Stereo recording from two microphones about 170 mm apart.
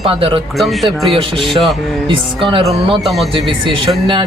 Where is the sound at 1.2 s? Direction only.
30° right (ahead or behind).